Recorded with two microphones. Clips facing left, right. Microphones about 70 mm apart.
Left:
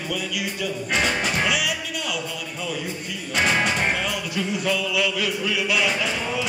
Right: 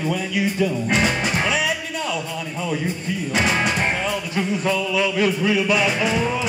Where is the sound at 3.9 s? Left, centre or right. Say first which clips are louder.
Right 2 dB; right.